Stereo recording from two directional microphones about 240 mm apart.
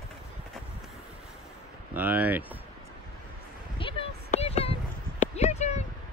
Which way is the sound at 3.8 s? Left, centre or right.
Left.